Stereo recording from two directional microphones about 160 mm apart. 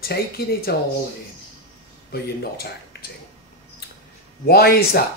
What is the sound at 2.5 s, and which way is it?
Speech, 75° left (ahead or behind).